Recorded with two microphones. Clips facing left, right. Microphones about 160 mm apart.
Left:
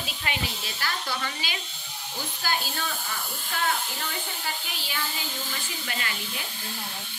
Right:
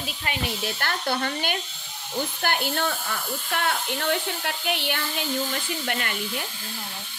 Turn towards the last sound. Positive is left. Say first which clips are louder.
# right 5 dB
turn(degrees=-55)  # may be behind; listen again after turning